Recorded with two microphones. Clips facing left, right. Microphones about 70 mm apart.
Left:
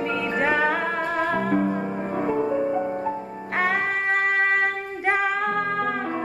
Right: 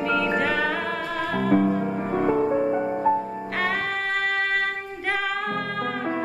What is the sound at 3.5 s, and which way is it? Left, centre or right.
Music, left.